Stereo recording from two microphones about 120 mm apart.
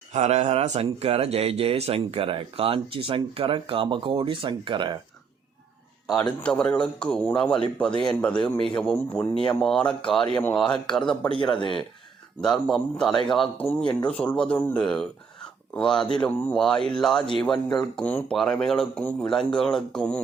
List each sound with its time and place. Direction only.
0.1 s speech: 65° right (ahead or behind); by 4.9 s 40° right (ahead or behind)
6.1 s a man's voice: 5° left (ahead or behind)
9.3 s a man's voice: 45° left (ahead or behind)
9.6 s a man's voice: 5° left (ahead or behind)
11.5 s a man's voice: 45° left (ahead or behind)
12.4 s a man's voice: 5° left (ahead or behind)